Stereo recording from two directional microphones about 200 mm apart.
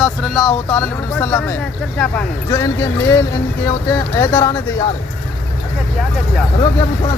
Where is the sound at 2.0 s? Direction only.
10° left (ahead or behind).